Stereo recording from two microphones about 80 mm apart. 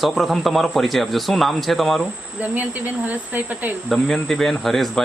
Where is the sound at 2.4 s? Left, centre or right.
Centre.